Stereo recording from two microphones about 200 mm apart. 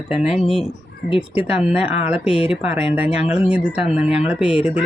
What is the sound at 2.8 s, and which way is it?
Speech, 30° left (ahead or behind).